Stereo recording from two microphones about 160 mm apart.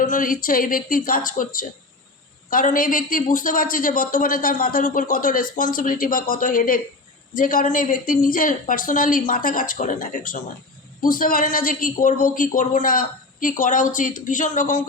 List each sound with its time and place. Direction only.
0.0 s a woman's voice: 60° left (ahead or behind)